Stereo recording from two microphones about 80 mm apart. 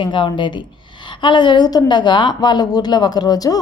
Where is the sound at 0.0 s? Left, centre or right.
Left.